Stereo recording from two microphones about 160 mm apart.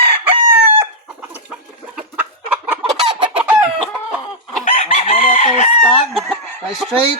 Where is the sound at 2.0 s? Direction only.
10° right (ahead or behind).